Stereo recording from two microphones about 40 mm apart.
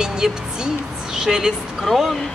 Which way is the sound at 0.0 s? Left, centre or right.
Centre.